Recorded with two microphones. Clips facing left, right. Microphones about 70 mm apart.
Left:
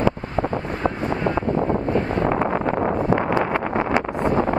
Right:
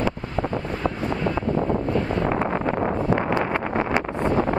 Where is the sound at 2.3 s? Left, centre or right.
Left.